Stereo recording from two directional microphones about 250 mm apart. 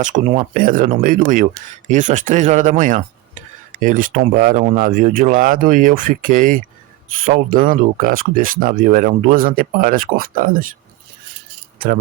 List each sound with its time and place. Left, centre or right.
0.0 s speech: right